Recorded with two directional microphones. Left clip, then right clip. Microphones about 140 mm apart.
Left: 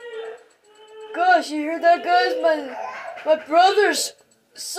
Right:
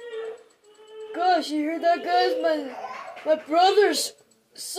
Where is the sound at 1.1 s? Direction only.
20° right (ahead or behind).